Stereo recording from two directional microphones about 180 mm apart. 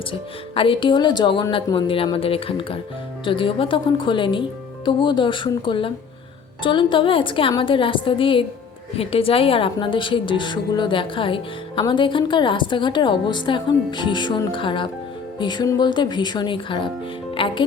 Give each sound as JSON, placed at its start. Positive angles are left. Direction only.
{"t": 0.1, "sound": "a woman's voice", "side_deg": 30}